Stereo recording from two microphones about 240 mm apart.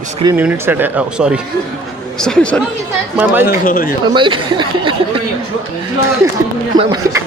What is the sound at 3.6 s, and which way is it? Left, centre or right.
Speech, left.